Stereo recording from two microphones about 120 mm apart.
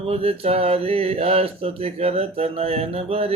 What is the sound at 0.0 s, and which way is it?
Speech, 55° right (ahead or behind).